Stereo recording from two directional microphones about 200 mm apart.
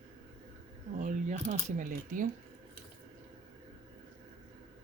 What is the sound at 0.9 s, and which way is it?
Speech, 40° right (ahead or behind).